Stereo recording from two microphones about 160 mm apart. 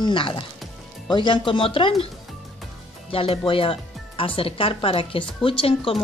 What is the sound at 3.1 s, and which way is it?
Speech, 35° left (ahead or behind).